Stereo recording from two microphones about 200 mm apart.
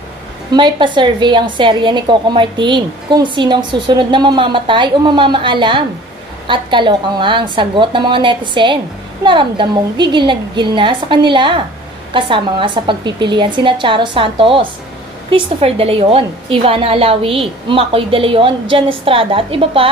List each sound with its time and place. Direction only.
0.5 s a woman's voice: 20° right (ahead or behind)